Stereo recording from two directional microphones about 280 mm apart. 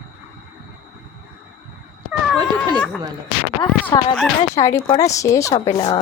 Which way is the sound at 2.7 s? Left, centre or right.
Centre.